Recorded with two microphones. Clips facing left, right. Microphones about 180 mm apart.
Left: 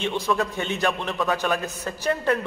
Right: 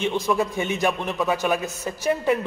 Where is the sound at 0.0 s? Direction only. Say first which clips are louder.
Right 2 dB; 10° right (ahead or behind).